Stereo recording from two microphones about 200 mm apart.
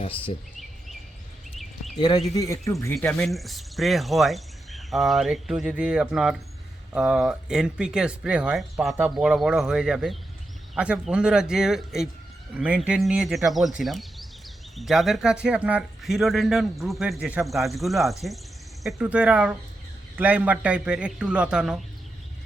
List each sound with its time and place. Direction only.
2.0 s speech: 20° left (ahead or behind)
2.9 s speech: 5° left (ahead or behind)